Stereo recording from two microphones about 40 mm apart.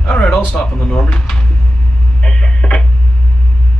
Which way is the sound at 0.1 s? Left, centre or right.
Left.